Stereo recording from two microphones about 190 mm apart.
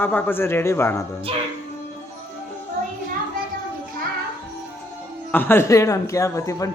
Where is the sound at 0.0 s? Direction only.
10° left (ahead or behind).